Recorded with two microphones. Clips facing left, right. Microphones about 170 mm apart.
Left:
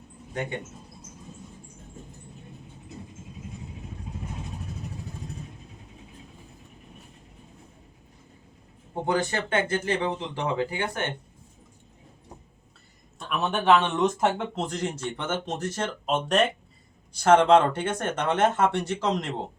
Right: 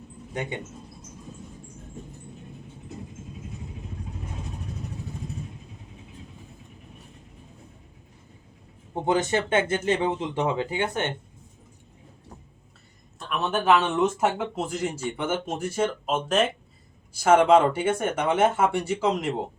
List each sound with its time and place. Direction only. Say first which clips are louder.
9.0 s speech: right 3 dB; 20° right (ahead or behind)
13.1 s speech: right 1 dB; centre (ahead or behind)